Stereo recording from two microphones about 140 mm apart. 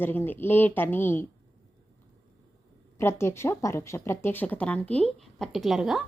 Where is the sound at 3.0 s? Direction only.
20° left (ahead or behind).